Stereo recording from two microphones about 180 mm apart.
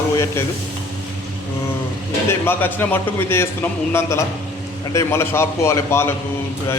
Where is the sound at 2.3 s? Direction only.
10° left (ahead or behind).